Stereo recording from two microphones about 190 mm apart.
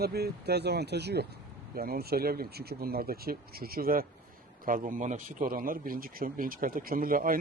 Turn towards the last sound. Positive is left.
turn(degrees=-50)  # may be behind; listen again after turning